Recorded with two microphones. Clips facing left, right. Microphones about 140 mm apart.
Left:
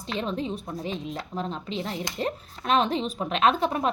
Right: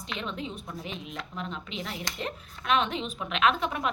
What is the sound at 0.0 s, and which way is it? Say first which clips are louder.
A woman's voice: left 6 dB; 35° left (ahead or behind).